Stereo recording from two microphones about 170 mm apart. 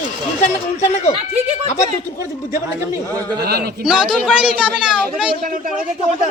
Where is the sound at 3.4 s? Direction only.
65° right (ahead or behind).